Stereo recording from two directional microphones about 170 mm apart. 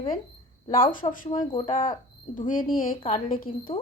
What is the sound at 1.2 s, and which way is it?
Speech, 50° left (ahead or behind).